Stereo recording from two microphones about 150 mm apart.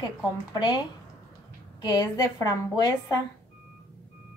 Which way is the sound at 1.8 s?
25° left (ahead or behind).